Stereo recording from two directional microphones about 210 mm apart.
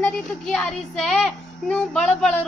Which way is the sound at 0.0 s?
5° left (ahead or behind).